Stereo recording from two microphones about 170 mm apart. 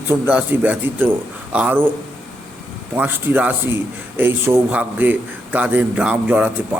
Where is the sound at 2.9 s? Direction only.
10° right (ahead or behind).